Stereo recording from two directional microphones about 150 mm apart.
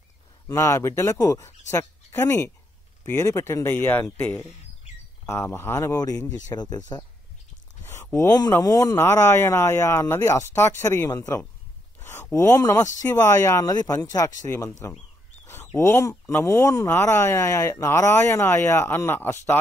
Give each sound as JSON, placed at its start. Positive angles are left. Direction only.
{"t": 0.5, "sound": "speech", "side_deg": 20}